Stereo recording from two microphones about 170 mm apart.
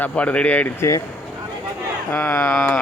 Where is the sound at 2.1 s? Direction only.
10° left (ahead or behind).